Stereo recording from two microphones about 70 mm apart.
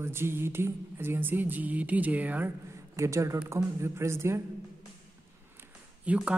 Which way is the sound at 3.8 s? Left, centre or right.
Right.